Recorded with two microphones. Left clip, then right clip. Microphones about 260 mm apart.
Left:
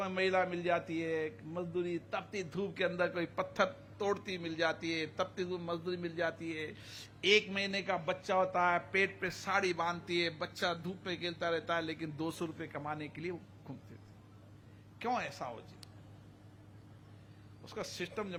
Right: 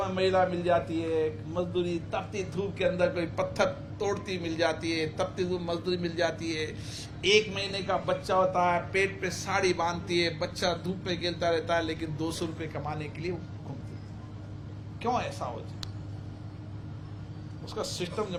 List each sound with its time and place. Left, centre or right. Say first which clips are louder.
0.0 s a man's voice: right 7 dB; left
15.0 s a man's voice: right 6 dB; left
17.7 s a man's voice: right 7 dB; left